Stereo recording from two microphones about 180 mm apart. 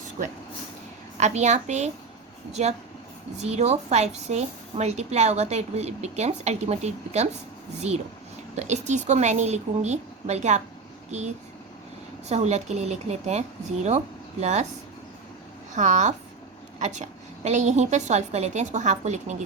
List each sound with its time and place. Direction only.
1.2 s a woman's voice: 40° right (ahead or behind)
12.3 s a woman's voice: 40° right (ahead or behind)
15.7 s a woman's voice: 40° right (ahead or behind)